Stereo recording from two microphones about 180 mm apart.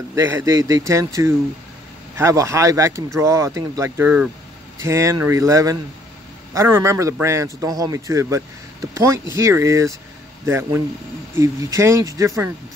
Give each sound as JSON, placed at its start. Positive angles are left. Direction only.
{"t": 0.1, "sound": "a man's voice", "side_deg": -15}